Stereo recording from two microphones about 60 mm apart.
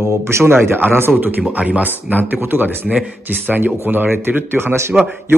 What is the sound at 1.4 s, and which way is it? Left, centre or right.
A man's voice, right.